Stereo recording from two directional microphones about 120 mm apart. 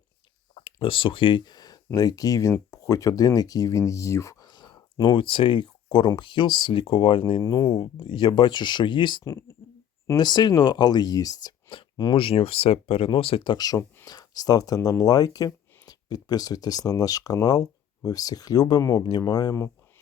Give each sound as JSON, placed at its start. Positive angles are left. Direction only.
{"t": 0.5, "sound": "speech", "side_deg": 50}
{"t": 7.4, "sound": "speech", "side_deg": 30}
{"t": 9.2, "sound": "speech", "side_deg": 25}